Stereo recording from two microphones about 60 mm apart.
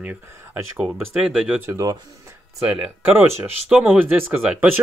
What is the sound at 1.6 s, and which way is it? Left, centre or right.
Speech, right.